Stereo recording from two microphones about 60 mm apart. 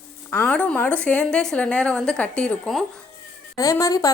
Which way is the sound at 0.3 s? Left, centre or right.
Left.